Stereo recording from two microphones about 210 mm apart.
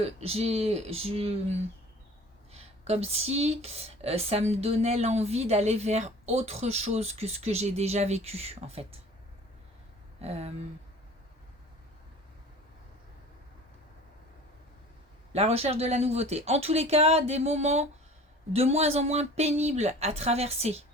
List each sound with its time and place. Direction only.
0.0 s speech: 30° right (ahead or behind)
2.5 s speech: 30° right (ahead or behind)
10.2 s speech: 30° right (ahead or behind)
15.3 s speech: 30° right (ahead or behind)